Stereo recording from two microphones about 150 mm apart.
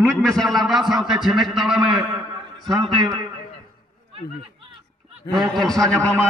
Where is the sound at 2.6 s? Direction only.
30° right (ahead or behind).